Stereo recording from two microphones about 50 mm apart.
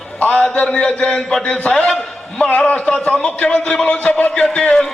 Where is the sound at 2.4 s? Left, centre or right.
Left.